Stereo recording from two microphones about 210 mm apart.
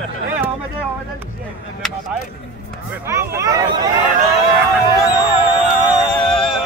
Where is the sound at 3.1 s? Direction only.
15° right (ahead or behind).